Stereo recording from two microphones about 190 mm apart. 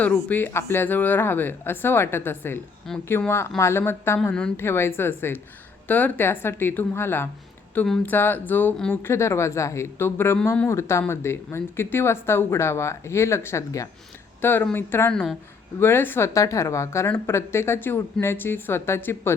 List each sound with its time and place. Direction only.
0.3 s speech: 10° left (ahead or behind)